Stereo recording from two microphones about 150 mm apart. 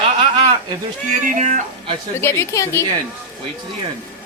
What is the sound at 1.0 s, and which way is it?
Speech, 60° right (ahead or behind).